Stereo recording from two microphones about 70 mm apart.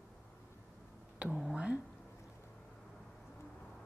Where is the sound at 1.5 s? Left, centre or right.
Centre.